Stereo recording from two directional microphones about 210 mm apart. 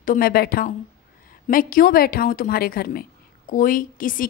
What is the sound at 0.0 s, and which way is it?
A woman's voice, 40° left (ahead or behind).